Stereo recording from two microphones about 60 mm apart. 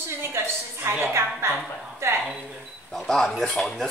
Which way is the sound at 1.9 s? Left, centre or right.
Right.